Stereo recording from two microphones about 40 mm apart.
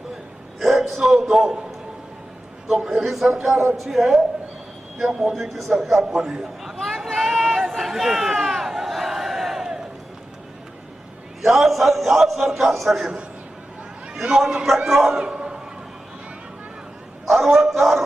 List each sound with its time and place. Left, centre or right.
0.6 s a man's voice: centre
2.8 s a man's voice: centre
5.3 s a man's voice: centre
6.7 s a sound: centre
11.4 s a man's voice: centre
14.2 s a man's voice: centre
15.2 s a sound: right
17.2 s a man's voice: centre